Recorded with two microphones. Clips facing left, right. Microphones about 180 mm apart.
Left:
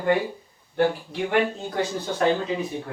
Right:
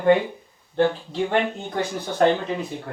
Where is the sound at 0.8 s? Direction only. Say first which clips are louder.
Right 2 dB; 15° left (ahead or behind).